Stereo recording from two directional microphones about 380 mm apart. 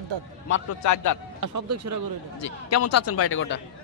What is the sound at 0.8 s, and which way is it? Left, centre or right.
Speech, left.